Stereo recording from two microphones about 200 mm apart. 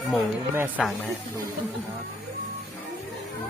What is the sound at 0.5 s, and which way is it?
Speech, 10° right (ahead or behind).